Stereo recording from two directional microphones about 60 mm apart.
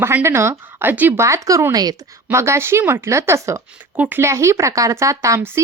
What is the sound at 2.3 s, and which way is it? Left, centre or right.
Speech, right.